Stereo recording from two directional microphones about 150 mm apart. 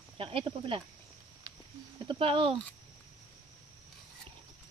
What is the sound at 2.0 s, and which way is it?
Speech, 35° right (ahead or behind).